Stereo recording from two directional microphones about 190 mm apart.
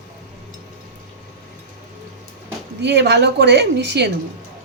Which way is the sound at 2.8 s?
65° right (ahead or behind).